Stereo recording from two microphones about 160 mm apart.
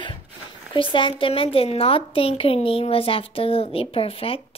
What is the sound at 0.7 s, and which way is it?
A woman's voice, 30° left (ahead or behind).